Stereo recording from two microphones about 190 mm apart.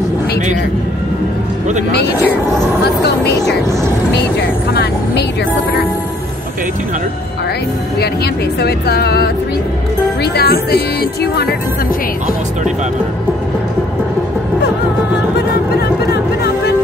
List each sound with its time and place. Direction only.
8.5 s speech: 55° left (ahead or behind)